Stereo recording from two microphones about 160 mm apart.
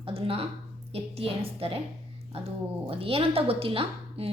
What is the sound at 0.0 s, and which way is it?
A woman's voice, 35° right (ahead or behind).